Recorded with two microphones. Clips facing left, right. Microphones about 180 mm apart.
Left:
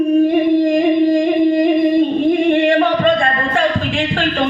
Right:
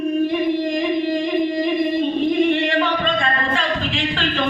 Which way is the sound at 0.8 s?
50° left (ahead or behind).